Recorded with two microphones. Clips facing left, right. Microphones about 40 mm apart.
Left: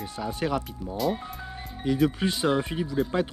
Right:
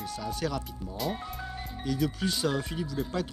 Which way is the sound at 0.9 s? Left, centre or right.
Centre.